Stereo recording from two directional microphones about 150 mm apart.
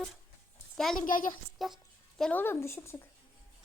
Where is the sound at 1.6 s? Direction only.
Centre (ahead or behind).